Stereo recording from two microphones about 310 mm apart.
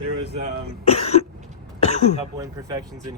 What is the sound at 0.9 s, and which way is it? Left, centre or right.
Speech, centre.